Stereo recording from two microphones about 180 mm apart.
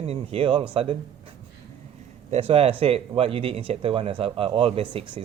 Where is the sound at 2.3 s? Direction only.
35° right (ahead or behind).